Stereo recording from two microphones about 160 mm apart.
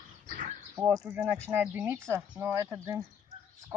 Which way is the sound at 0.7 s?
15° right (ahead or behind).